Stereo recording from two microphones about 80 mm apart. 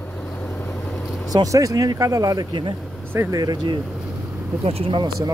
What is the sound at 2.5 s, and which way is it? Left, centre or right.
Speech, right.